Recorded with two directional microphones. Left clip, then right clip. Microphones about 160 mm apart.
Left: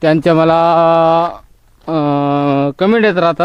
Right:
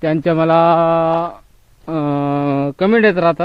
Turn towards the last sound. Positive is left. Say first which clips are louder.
# left 1 dB
turn(degrees=20)  # may be behind; listen again after turning